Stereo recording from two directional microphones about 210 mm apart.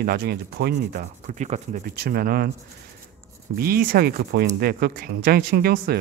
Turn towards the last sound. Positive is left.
turn(degrees=-45)  # may be behind; listen again after turning